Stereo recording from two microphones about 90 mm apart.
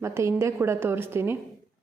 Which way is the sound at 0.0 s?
30° right (ahead or behind).